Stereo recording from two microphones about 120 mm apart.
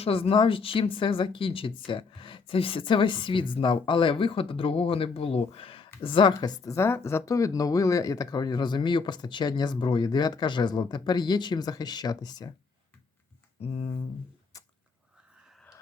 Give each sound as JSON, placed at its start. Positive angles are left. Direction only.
{"t": 0.0, "sound": "speech", "side_deg": 50}
{"t": 13.6, "sound": "speech", "side_deg": 55}
{"t": 14.5, "sound": "a sound", "side_deg": 30}